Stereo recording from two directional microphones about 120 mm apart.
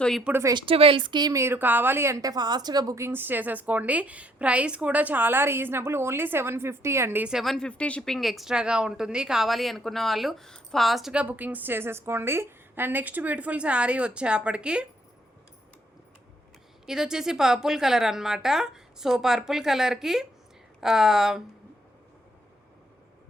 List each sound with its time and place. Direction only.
0.5 s a woman's voice: 50° right (ahead or behind); by 7.3 s 20° right (ahead or behind)
7.3 s speech: centre (ahead or behind)
16.8 s a woman's voice: 5° right (ahead or behind)